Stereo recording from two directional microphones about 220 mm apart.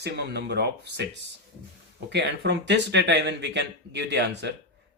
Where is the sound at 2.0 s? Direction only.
50° right (ahead or behind).